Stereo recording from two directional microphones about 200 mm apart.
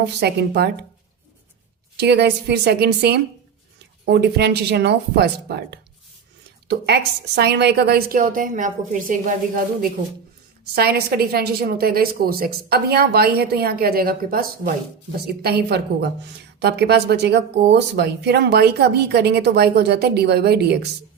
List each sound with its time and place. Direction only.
0.2 s speech: 55° right (ahead or behind)
2.0 s a woman's voice: 55° right (ahead or behind); by 9.3 s 40° right (ahead or behind)
10.8 s a woman's voice: 50° right (ahead or behind)